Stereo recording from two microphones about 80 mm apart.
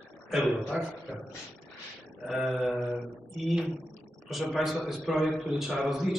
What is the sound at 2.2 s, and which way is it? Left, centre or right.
A man's voice, centre.